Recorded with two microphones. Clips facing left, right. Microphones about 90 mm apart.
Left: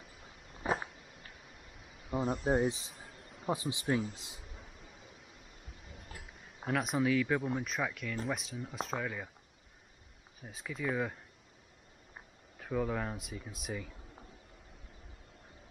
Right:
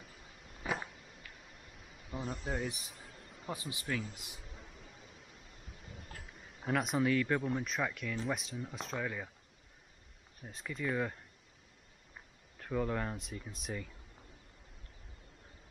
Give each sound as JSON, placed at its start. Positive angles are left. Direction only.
{"t": 2.1, "sound": "speech", "side_deg": 15}
{"t": 2.4, "sound": "speech", "side_deg": 35}
{"t": 2.9, "sound": "a sound", "side_deg": 0}
{"t": 3.4, "sound": "speech", "side_deg": 25}
{"t": 4.4, "sound": "a sound", "side_deg": 0}
{"t": 5.9, "sound": "speech", "side_deg": 0}
{"t": 10.4, "sound": "speech", "side_deg": 0}
{"t": 12.5, "sound": "speech", "side_deg": 5}